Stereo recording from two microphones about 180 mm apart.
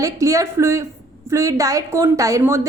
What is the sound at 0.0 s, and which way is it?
A woman's voice, 15° right (ahead or behind).